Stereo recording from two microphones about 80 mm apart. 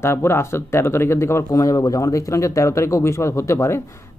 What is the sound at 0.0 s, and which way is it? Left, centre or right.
Speech, left.